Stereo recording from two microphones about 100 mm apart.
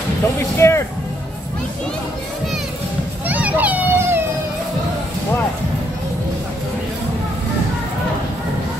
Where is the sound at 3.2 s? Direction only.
15° right (ahead or behind).